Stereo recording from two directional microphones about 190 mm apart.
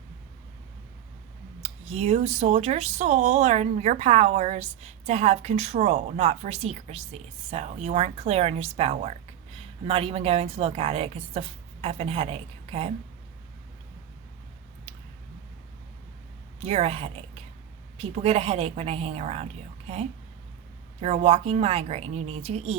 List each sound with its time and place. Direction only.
1.6 s speech: 35° right (ahead or behind)
16.6 s speech: 30° right (ahead or behind)
21.0 s speech: 35° right (ahead or behind)